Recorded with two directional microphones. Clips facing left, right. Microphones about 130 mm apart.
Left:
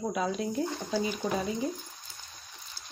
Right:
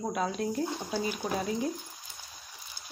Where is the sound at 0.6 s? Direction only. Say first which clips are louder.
Left 1 dB; 15° right (ahead or behind).